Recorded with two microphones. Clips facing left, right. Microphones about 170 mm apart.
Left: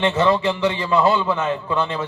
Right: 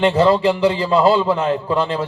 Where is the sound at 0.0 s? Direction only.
35° right (ahead or behind).